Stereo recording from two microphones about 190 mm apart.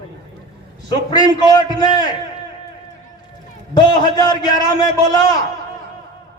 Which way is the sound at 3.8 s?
20° left (ahead or behind).